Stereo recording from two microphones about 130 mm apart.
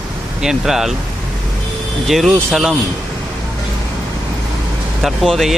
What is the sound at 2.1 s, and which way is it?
Speech, centre (ahead or behind).